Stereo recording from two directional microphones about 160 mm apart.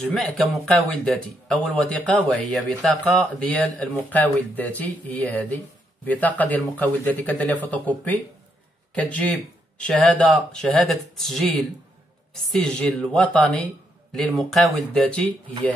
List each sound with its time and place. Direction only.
0.0 s speech: centre (ahead or behind)
12.4 s speech: 5° left (ahead or behind)